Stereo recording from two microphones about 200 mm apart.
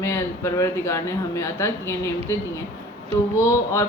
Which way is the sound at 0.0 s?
15° left (ahead or behind).